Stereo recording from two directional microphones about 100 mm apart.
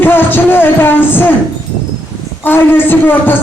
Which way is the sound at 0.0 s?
20° left (ahead or behind).